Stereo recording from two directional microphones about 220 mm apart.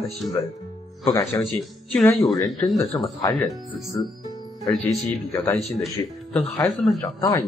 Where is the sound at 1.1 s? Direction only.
15° left (ahead or behind).